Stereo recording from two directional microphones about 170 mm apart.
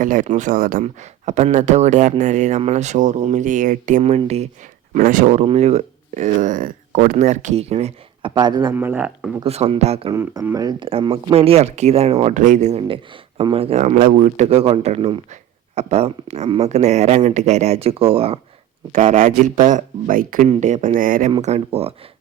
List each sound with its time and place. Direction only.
0.0 s speech: 50° right (ahead or behind)
8.3 s a man's voice: 25° right (ahead or behind)
8.7 s speech: 10° right (ahead or behind)
9.4 s speech: 35° right (ahead or behind)
10.1 s speech: 15° right (ahead or behind); by 18.3 s 35° right (ahead or behind)
18.9 s speech: 50° right (ahead or behind)
20.5 s speech: 45° right (ahead or behind)
21.4 s speech: 40° right (ahead or behind)